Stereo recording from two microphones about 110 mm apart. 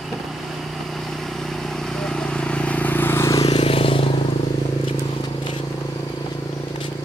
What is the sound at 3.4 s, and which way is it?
Vehicle, 65° left (ahead or behind).